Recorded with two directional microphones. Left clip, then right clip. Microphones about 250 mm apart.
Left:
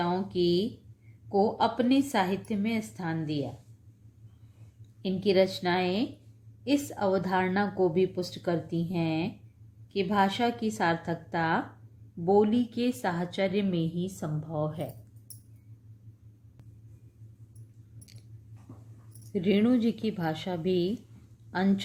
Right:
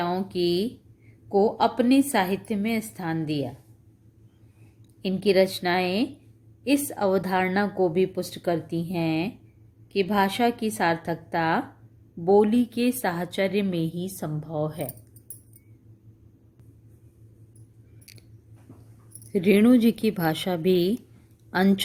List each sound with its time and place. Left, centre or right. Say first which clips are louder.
0.0 s a sound: right 2 dB; right
1.3 s a woman's voice: right 4 dB; right
5.0 s a woman's voice: right 4 dB; right
18.0 s keys jangling: right 6 dB; right
19.3 s a woman's voice: right 7 dB; right